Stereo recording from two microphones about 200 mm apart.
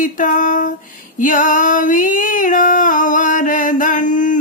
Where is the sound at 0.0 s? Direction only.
40° left (ahead or behind).